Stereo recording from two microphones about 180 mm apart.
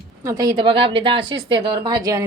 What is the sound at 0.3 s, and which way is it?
Speech, 20° right (ahead or behind).